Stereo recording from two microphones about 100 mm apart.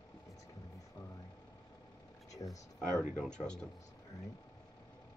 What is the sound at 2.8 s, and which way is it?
Speech, 5° left (ahead or behind).